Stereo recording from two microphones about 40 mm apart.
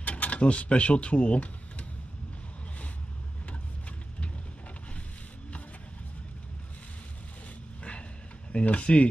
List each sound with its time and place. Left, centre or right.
0.0 s speech: left
8.5 s speech: left